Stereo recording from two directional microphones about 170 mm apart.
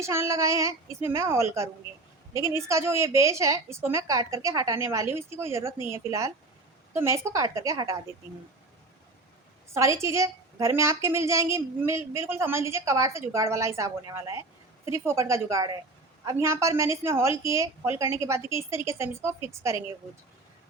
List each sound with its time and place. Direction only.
0.0 s a woman's voice: 15° right (ahead or behind)
9.7 s a woman's voice: 15° right (ahead or behind)